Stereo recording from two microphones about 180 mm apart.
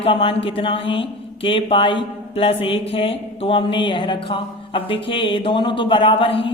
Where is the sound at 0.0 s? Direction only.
30° left (ahead or behind).